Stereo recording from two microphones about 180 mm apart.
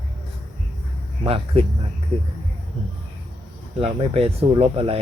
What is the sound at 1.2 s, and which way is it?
Speech, 35° right (ahead or behind).